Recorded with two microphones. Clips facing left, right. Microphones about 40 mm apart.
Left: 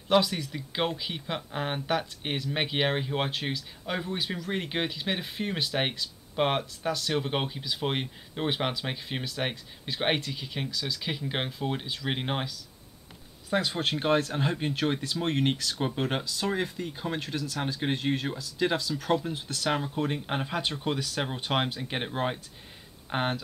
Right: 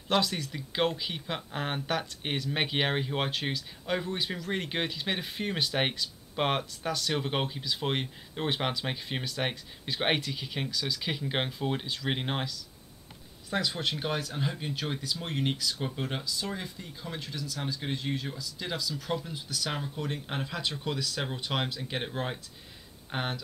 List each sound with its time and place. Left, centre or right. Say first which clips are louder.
0.1 s speech: left 4 dB; centre
13.6 s speech: left 2 dB; left
16.5 s speech: left 8 dB; left; by 23.3 s centre